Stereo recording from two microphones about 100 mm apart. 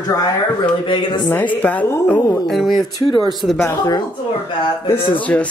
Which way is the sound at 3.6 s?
40° left (ahead or behind).